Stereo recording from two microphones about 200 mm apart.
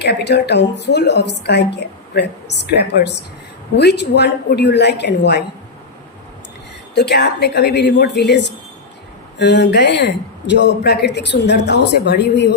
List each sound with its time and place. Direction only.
0.0 s speech: 55° left (ahead or behind)
6.9 s speech: 55° left (ahead or behind)